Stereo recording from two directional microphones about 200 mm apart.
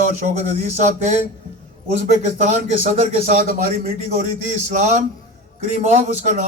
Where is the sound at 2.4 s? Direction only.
35° right (ahead or behind).